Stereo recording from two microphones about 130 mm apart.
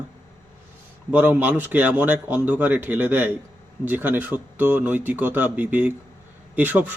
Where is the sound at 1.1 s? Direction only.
15° right (ahead or behind).